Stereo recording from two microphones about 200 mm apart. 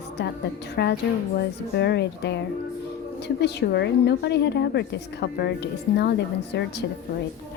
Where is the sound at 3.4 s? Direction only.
55° left (ahead or behind).